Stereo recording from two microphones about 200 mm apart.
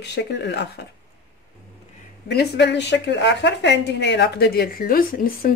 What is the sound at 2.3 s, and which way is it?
Dishes, 55° left (ahead or behind).